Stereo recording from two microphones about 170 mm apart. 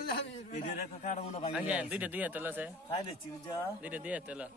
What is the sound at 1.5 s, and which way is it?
Speech, 5° right (ahead or behind).